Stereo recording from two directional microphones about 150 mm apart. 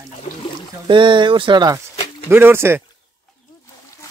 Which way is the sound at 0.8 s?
30° right (ahead or behind).